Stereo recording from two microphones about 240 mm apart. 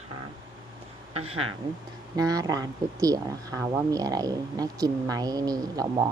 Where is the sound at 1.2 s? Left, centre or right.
Right.